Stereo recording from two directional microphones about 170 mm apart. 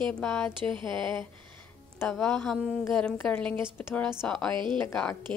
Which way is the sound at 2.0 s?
5° left (ahead or behind).